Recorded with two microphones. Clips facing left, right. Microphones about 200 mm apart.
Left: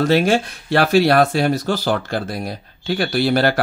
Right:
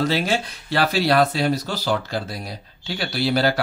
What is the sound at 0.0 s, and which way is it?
Speech, 50° left (ahead or behind).